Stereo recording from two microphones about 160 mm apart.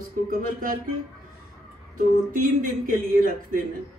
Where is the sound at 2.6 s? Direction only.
60° right (ahead or behind).